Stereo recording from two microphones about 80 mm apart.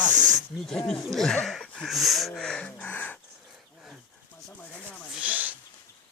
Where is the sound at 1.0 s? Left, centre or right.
Centre.